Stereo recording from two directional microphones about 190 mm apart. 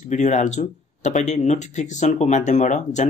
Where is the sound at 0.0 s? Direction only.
40° left (ahead or behind).